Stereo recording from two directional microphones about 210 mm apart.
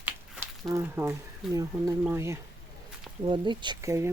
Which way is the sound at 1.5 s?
15° right (ahead or behind).